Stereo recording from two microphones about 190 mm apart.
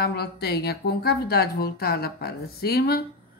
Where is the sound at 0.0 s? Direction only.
55° left (ahead or behind).